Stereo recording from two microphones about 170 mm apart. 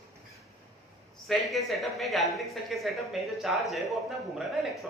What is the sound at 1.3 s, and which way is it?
A woman's voice, centre (ahead or behind).